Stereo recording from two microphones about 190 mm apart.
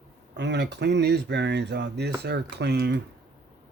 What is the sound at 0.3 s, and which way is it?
Speech, 65° right (ahead or behind).